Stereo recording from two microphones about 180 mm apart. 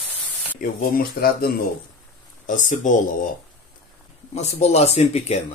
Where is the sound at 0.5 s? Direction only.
55° left (ahead or behind).